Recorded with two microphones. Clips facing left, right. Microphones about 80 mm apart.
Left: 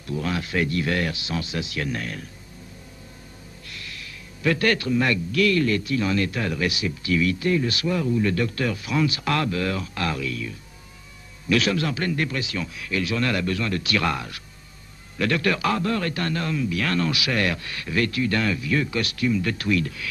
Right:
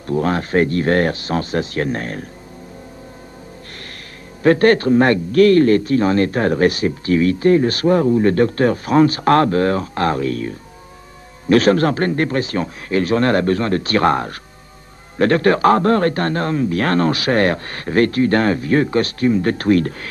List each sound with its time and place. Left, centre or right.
0.0 s a man's voice: right
4.4 s a man's voice: right